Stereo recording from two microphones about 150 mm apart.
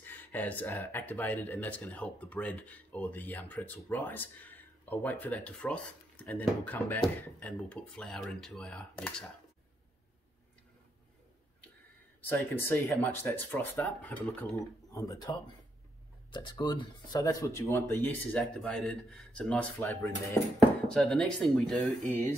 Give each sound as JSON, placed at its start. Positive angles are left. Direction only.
{"t": 0.0, "sound": "speech", "side_deg": 10}
{"t": 12.2, "sound": "speech", "side_deg": 15}
{"t": 18.4, "sound": "speech", "side_deg": 0}
{"t": 19.8, "sound": "speech", "side_deg": 15}
{"t": 20.5, "sound": "speech", "side_deg": 5}